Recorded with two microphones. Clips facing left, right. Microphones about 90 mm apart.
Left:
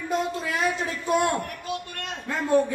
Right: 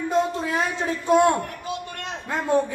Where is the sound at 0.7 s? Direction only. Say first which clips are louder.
Right 5 dB; 25° right (ahead or behind).